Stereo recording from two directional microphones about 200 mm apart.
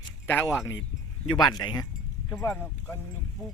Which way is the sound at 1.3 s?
20° left (ahead or behind).